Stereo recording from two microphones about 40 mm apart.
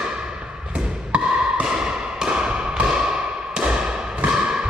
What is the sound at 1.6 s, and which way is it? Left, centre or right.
Tap, centre.